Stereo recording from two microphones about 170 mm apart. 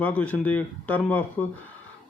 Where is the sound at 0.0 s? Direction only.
10° left (ahead or behind).